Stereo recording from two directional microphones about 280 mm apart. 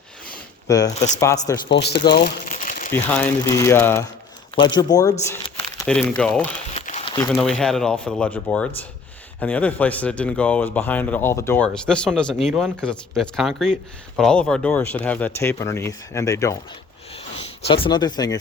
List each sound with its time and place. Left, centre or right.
0.7 s speech: centre
1.7 s speech: left
2.1 s crumpling: left
2.9 s speech: centre
6.7 s a sound: left
7.3 s speech: centre
17.7 s speech: centre